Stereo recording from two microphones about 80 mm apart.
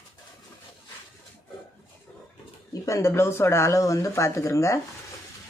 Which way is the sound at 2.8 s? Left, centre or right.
Left.